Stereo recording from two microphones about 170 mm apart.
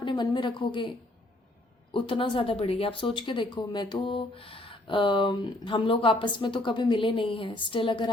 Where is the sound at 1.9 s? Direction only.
30° left (ahead or behind).